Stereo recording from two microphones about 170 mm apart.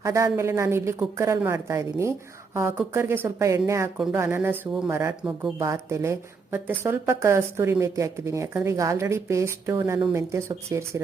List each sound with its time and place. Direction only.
0.0 s a woman's voice: 20° right (ahead or behind)